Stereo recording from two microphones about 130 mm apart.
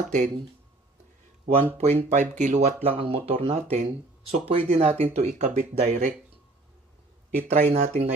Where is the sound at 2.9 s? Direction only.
50° right (ahead or behind).